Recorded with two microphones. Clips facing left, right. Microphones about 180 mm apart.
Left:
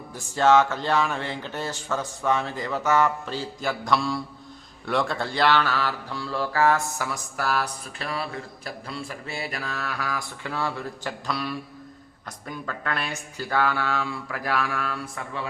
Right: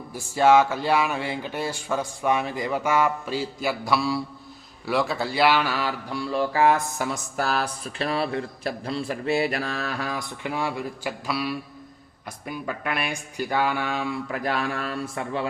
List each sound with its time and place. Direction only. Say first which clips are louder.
0.1 s speech: right 1 dB; 10° right (ahead or behind); by 8.3 s 30° right (ahead or behind)
9.0 s mantra: right 10 dB; 55° right (ahead or behind)
9.6 s speech: right 3 dB; 30° right (ahead or behind)